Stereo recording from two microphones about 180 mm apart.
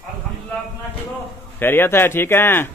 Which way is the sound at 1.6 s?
10° left (ahead or behind).